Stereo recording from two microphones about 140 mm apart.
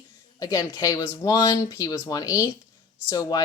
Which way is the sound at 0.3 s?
25° left (ahead or behind).